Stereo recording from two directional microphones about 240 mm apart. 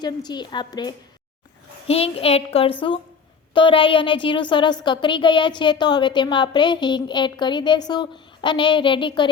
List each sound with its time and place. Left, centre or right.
0.0 s a woman's voice: centre